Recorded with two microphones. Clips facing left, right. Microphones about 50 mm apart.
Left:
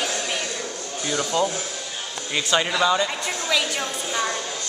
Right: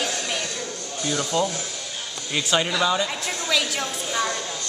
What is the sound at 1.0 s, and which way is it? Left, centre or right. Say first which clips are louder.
Speech: even; left.